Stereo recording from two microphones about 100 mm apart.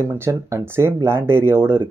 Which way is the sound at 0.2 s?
25° right (ahead or behind).